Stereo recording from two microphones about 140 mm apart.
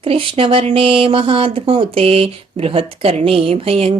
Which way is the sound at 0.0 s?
40° right (ahead or behind).